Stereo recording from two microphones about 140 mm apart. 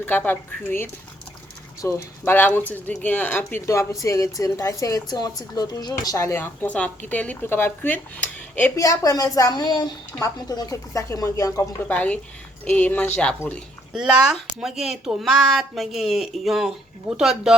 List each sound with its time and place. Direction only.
0.0 s speech: 15° left (ahead or behind)
8.7 s speech: 25° left (ahead or behind)
11.9 s speech: 10° left (ahead or behind)
13.9 s speech: 5° right (ahead or behind)